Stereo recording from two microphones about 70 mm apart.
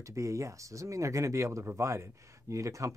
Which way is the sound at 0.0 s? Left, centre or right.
Right.